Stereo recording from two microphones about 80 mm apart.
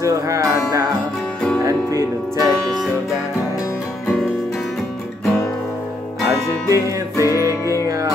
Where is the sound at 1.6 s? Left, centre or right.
Right.